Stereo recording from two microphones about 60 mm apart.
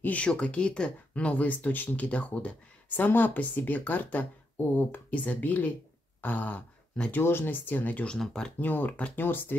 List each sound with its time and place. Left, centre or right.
0.0 s speech: left
7.1 s speech: left
8.1 s speech: centre
8.5 s speech: left